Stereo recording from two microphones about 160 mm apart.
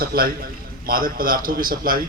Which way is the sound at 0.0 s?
70° right (ahead or behind).